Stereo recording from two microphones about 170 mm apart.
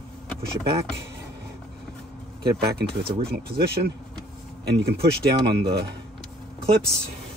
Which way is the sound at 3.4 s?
70° right (ahead or behind).